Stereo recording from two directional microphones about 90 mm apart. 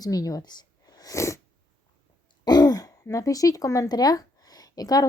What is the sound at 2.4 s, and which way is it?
Speech, 50° left (ahead or behind).